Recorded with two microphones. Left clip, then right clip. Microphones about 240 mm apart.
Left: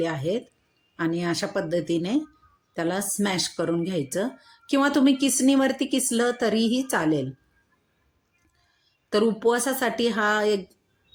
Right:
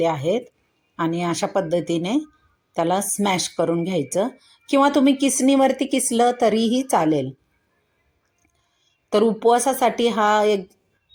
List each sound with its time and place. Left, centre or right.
0.0 s speech: centre
9.0 s speech: centre